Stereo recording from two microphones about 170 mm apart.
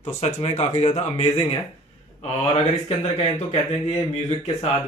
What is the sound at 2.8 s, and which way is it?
Speech, 40° left (ahead or behind).